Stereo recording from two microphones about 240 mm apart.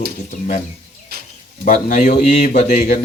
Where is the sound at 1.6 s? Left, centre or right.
Left.